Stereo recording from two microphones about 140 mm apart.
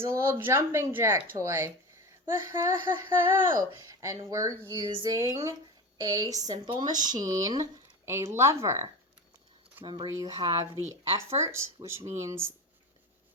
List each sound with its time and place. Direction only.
0.0 s speech: 20° right (ahead or behind)
4.7 s speech: 35° right (ahead or behind)
9.8 s speech: 35° right (ahead or behind); by 12.5 s 20° right (ahead or behind)